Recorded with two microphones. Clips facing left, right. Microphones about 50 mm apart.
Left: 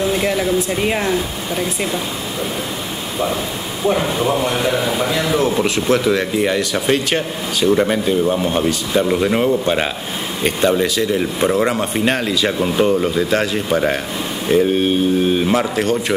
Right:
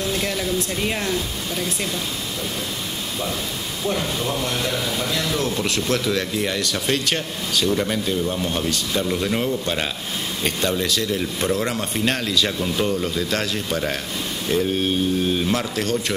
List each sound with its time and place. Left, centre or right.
0.0 s a man's voice: centre
3.8 s a man's voice: centre